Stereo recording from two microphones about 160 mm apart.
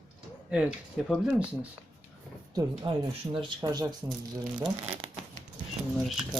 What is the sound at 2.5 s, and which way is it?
Speech, 30° right (ahead or behind).